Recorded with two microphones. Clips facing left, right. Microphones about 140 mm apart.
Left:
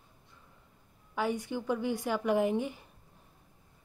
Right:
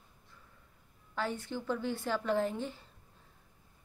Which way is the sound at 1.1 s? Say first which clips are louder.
Left 4 dB; 15° left (ahead or behind).